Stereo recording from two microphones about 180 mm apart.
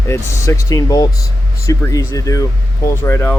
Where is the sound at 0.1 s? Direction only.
15° left (ahead or behind).